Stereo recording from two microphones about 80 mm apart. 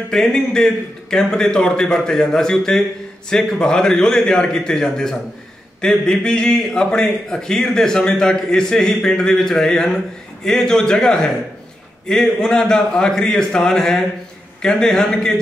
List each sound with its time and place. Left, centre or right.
0.1 s a man's voice: centre